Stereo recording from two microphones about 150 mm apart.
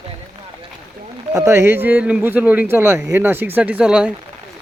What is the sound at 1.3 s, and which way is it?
Speech, 20° right (ahead or behind).